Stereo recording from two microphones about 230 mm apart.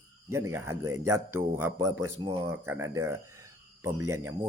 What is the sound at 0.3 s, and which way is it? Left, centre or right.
Speech, centre.